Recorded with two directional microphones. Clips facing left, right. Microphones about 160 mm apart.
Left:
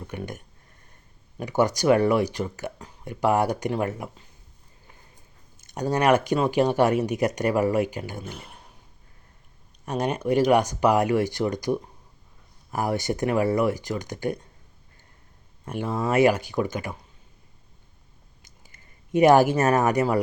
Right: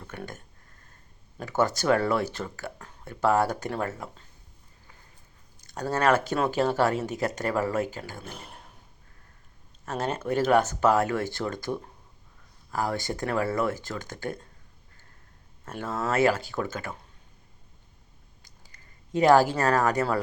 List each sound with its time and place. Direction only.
0.1 s speech: 15° left (ahead or behind)
1.4 s speech: 15° left (ahead or behind)
5.6 s speech: 15° left (ahead or behind)
9.8 s speech: 15° left (ahead or behind)
15.6 s speech: 15° left (ahead or behind)
18.4 s a sound: 20° left (ahead or behind)